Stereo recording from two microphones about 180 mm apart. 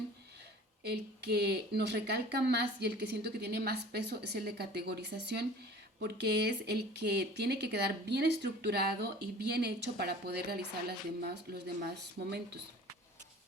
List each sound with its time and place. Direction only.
0.9 s speech: 65° right (ahead or behind)